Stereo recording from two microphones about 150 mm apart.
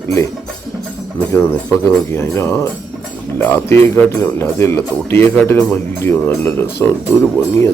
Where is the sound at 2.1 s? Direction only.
15° left (ahead or behind).